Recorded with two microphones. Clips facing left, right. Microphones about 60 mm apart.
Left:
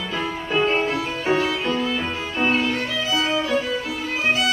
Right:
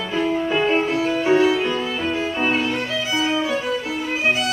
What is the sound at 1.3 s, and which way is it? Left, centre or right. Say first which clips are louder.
Violin: right 4 dB; right.